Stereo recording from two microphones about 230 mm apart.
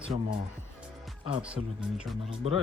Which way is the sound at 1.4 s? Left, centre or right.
Centre.